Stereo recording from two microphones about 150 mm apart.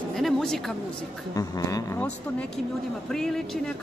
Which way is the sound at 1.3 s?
25° left (ahead or behind).